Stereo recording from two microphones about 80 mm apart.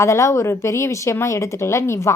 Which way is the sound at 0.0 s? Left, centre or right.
Left.